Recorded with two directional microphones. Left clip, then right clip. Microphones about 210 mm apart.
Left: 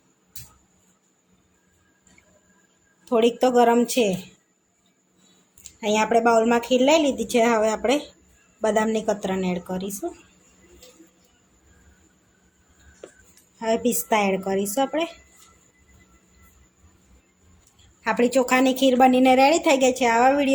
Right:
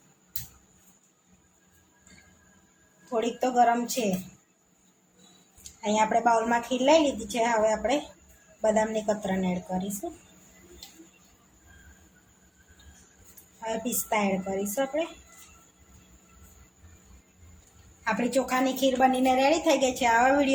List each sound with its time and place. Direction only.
3.1 s a woman's voice: 40° left (ahead or behind)
5.8 s a woman's voice: 35° left (ahead or behind)
13.6 s a woman's voice: 45° left (ahead or behind)
18.0 s a woman's voice: 35° left (ahead or behind)